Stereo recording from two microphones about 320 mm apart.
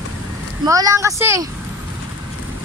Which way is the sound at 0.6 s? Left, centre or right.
Centre.